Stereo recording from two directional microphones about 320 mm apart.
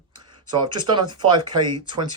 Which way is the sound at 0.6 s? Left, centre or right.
Centre.